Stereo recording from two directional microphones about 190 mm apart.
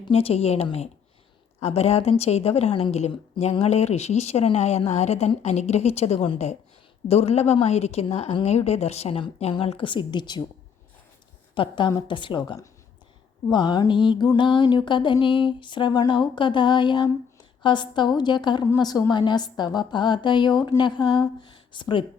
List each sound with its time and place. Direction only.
0.0 s a woman's voice: 30° left (ahead or behind)
11.5 s a woman's voice: 25° left (ahead or behind)